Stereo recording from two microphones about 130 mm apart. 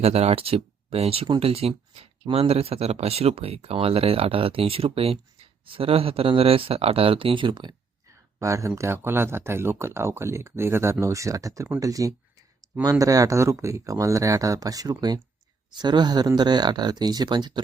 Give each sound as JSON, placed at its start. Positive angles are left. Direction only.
{"t": 0.0, "sound": "speech", "side_deg": -55}
{"t": 8.4, "sound": "speech", "side_deg": -25}